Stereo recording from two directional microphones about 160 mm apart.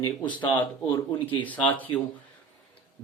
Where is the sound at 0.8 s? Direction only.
25° left (ahead or behind).